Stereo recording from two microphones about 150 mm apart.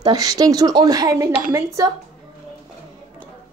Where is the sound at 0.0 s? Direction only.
25° right (ahead or behind).